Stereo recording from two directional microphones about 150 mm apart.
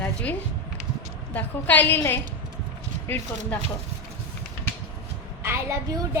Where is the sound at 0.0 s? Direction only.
10° left (ahead or behind).